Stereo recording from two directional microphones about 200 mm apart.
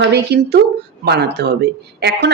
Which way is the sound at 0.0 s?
55° right (ahead or behind).